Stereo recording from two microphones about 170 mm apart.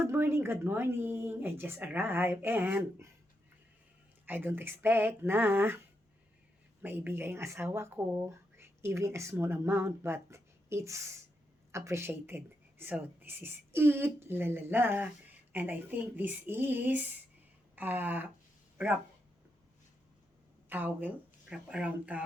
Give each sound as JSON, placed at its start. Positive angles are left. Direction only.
{"t": 0.0, "sound": "speech", "side_deg": -15}
{"t": 4.3, "sound": "speech", "side_deg": -10}
{"t": 6.8, "sound": "speech", "side_deg": -10}
{"t": 20.7, "sound": "a woman's voice", "side_deg": -10}